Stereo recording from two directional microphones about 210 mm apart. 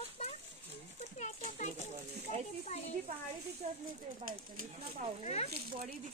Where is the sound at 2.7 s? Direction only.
35° left (ahead or behind).